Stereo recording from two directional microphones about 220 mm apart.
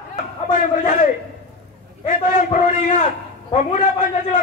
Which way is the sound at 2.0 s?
35° left (ahead or behind).